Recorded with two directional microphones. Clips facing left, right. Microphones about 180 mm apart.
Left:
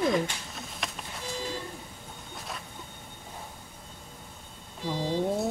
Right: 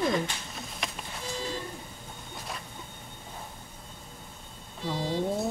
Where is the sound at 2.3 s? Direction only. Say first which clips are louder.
Even; centre (ahead or behind).